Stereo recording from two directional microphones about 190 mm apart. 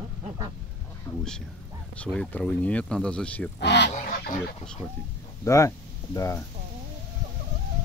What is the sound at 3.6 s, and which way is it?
Speech, 65° left (ahead or behind).